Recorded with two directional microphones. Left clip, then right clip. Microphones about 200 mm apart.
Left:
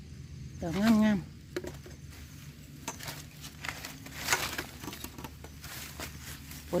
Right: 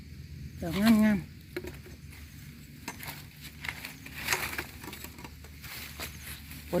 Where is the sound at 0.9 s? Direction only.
10° left (ahead or behind).